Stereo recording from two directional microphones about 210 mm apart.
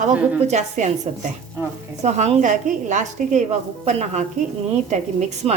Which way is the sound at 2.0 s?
30° right (ahead or behind).